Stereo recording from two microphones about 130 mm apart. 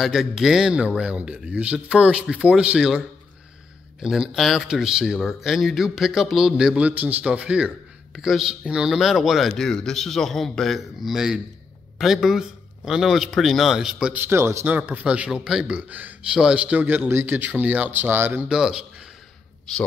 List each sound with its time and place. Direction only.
0.0 s a man's voice: 5° right (ahead or behind)
4.0 s speech: 5° right (ahead or behind)
14.2 s a man's voice: 20° right (ahead or behind)
18.5 s speech: 5° right (ahead or behind)